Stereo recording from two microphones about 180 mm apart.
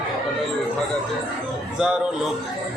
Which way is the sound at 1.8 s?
5° right (ahead or behind).